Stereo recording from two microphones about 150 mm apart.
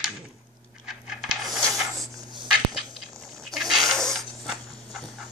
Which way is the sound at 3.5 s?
Centre (ahead or behind).